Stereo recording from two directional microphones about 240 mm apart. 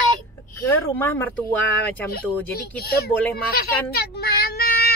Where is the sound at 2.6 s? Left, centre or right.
Left.